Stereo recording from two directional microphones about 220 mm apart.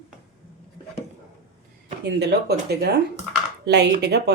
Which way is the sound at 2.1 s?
50° right (ahead or behind).